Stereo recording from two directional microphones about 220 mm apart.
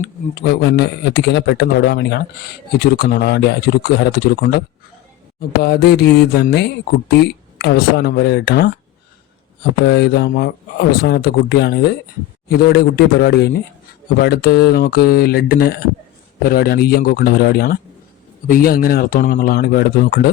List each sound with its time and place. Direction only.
0.4 s a man's voice: 50° left (ahead or behind)
9.8 s a man's voice: 50° left (ahead or behind)